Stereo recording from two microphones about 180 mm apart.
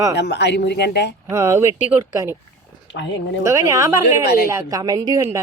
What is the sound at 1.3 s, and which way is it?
A woman's voice, 15° right (ahead or behind).